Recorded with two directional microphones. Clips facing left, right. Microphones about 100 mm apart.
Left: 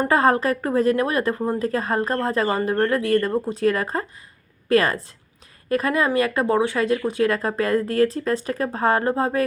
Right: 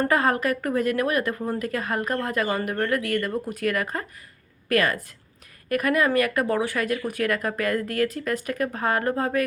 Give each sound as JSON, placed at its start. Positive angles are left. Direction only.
{"t": 0.1, "sound": "speech", "side_deg": 30}